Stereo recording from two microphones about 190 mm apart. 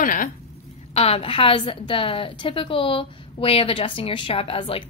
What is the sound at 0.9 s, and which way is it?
A woman's voice, 35° left (ahead or behind).